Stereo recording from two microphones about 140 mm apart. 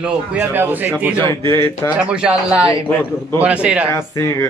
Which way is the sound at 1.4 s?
20° left (ahead or behind).